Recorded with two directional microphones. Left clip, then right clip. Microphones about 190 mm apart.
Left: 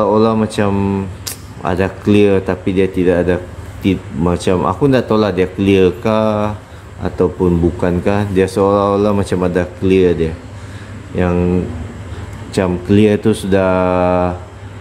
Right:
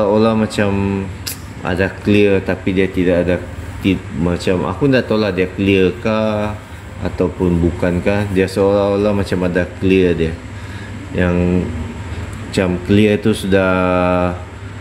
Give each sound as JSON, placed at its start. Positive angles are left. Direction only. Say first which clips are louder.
{"t": 0.0, "sound": "speech", "louder": "left 1 dB", "side_deg": 10}
{"t": 7.8, "sound": "speech", "louder": "left 1 dB", "side_deg": 15}
{"t": 12.5, "sound": "speech", "louder": "left 1 dB", "side_deg": 10}